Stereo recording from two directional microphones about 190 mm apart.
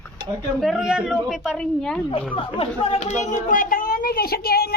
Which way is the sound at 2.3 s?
30° left (ahead or behind).